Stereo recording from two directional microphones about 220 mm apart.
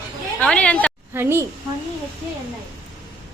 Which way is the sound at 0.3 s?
5° left (ahead or behind).